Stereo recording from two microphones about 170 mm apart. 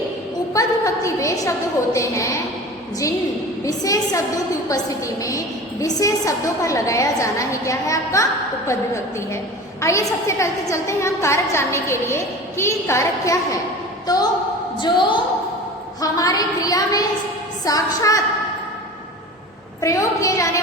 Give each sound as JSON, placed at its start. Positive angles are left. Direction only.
{"t": 0.5, "sound": "a woman's voice", "side_deg": 20}
{"t": 3.7, "sound": "a woman's voice", "side_deg": 20}
{"t": 14.8, "sound": "a woman's voice", "side_deg": 25}
{"t": 19.8, "sound": "a woman's voice", "side_deg": 20}